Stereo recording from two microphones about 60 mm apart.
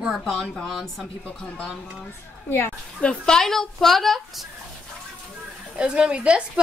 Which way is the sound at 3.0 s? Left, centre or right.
Centre.